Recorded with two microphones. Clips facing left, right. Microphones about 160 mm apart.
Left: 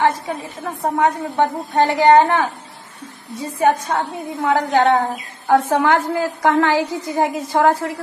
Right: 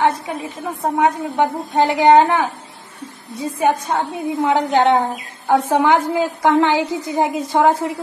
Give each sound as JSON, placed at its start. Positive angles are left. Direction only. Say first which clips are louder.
{"t": 0.9, "sound": "a woman's voice", "louder": "right 1 dB", "side_deg": -10}